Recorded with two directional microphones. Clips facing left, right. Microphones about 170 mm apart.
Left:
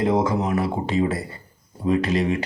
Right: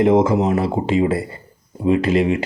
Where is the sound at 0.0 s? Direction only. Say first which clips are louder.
Right 6 dB; 25° right (ahead or behind).